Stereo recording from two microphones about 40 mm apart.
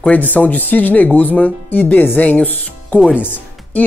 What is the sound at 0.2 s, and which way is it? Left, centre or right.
Speech, left.